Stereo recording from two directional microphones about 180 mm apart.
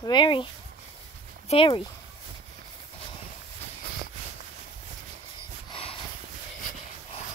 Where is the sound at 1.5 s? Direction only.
30° left (ahead or behind).